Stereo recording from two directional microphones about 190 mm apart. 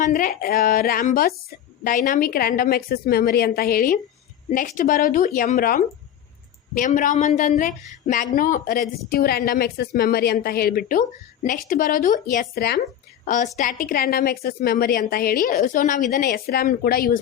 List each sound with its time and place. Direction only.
0.0 s a woman's voice: 50° left (ahead or behind)
13.2 s a woman's voice: 40° left (ahead or behind)